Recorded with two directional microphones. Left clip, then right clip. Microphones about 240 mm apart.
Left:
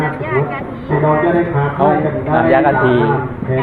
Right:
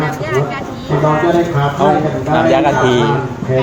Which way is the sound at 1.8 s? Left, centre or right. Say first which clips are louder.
Even; centre.